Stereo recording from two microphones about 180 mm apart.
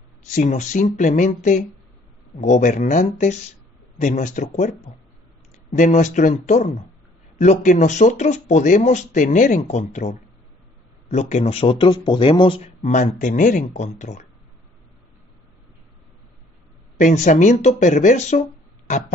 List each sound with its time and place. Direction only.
0.2 s a man's voice: 45° left (ahead or behind)
17.0 s a man's voice: 45° left (ahead or behind)
18.9 s a sound: 40° left (ahead or behind)